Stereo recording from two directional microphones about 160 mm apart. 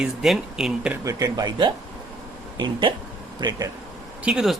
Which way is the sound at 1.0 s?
25° right (ahead or behind).